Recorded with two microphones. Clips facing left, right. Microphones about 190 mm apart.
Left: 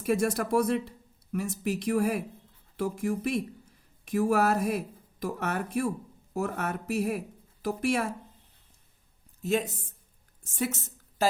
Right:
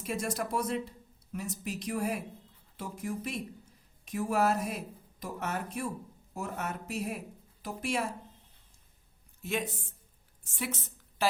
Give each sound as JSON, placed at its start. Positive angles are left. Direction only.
{"t": 0.0, "sound": "speech", "side_deg": 60}
{"t": 9.4, "sound": "speech", "side_deg": 40}